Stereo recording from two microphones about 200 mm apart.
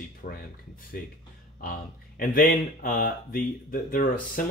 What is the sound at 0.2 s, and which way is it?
Speech, 40° left (ahead or behind).